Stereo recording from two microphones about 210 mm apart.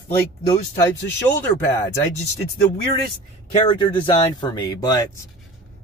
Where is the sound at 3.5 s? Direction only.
25° left (ahead or behind).